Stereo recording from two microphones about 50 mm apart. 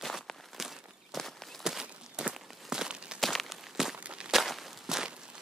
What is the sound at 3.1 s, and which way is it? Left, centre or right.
Walk, centre.